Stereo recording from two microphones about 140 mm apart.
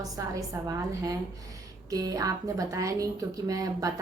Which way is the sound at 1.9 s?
25° right (ahead or behind).